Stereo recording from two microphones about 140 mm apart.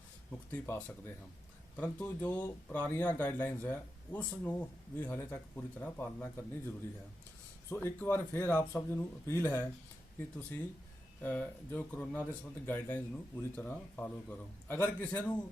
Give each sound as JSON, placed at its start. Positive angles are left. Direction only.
{"t": 0.3, "sound": "speech", "side_deg": 15}
{"t": 11.2, "sound": "speech", "side_deg": 10}